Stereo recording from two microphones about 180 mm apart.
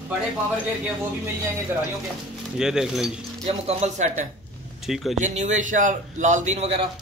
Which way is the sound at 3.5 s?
35° right (ahead or behind).